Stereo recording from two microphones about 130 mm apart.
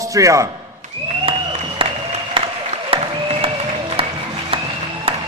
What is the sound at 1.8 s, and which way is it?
Applause, 45° right (ahead or behind).